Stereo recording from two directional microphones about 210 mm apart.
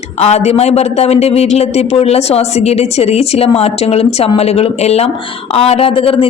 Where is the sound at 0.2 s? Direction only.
30° left (ahead or behind).